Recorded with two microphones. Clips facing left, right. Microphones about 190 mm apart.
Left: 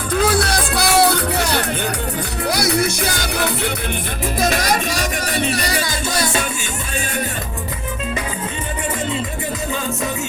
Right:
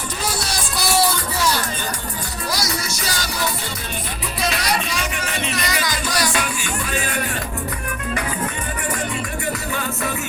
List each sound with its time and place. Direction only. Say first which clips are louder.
0.1 s music: left 11 dB; 55° left (ahead or behind)
4.4 s music: left 4 dB; 45° left (ahead or behind); by 6.5 s 25° left (ahead or behind)